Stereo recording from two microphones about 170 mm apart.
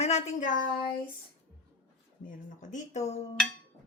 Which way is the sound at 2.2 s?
50° left (ahead or behind).